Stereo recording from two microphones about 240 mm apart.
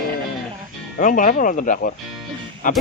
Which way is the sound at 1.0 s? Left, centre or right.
Left.